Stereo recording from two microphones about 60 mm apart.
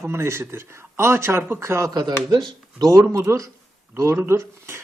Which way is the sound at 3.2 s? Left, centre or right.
Right.